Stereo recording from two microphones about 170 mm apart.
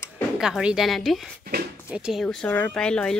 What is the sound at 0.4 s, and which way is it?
Speech, 5° right (ahead or behind).